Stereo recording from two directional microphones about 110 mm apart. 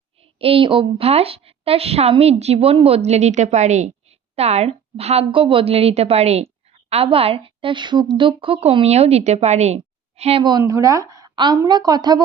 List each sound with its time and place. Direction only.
0.2 s a woman's voice: 60° right (ahead or behind)
10.6 s speech: 30° right (ahead or behind)